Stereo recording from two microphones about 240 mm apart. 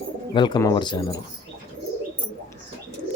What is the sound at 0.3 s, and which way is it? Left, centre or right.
Speech, centre.